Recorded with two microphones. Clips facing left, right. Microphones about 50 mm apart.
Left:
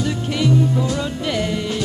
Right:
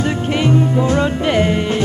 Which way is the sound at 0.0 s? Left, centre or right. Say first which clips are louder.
Right 4 dB; right.